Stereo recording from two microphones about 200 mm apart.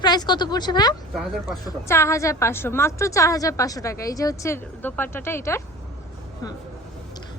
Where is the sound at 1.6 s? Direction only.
15° left (ahead or behind).